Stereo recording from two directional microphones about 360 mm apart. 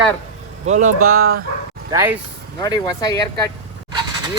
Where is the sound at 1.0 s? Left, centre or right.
Right.